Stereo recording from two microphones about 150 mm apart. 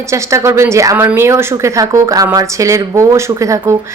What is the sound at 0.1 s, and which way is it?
Speech, 20° right (ahead or behind).